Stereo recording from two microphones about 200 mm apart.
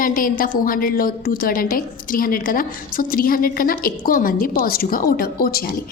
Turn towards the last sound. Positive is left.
turn(degrees=45)  # may be behind; listen again after turning